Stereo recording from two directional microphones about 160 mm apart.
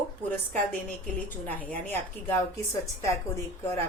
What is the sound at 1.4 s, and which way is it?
Speech, 10° left (ahead or behind).